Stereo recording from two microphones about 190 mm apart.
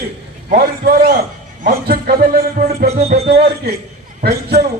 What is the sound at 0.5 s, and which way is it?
A man's voice, 55° right (ahead or behind).